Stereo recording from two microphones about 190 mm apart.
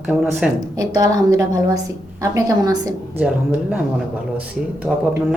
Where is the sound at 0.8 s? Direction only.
20° right (ahead or behind).